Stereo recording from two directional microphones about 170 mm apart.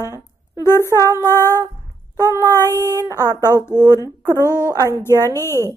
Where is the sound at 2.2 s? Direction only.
20° right (ahead or behind).